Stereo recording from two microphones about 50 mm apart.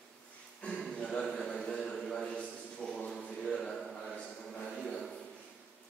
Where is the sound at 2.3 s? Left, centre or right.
Centre.